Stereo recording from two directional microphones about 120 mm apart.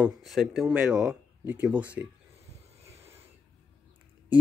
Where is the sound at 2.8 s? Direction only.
60° right (ahead or behind).